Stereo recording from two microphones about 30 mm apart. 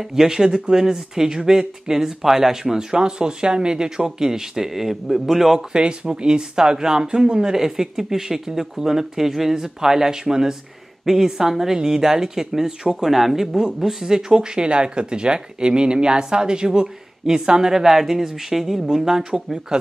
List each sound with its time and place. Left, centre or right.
0.0 s speech: centre
5.7 s speech: right; by 14.0 s centre
14.0 s speech: right
19.3 s speech: right